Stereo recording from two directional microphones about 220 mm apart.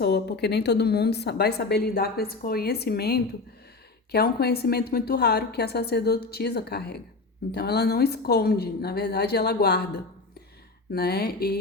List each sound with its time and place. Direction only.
0.0 s a woman's voice: 50° left (ahead or behind)